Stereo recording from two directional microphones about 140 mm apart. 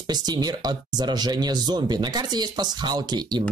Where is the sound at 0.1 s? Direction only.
30° right (ahead or behind).